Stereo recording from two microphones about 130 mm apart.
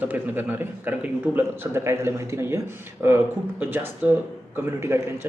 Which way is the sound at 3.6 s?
15° right (ahead or behind).